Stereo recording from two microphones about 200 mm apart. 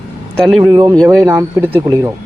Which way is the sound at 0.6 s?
20° right (ahead or behind).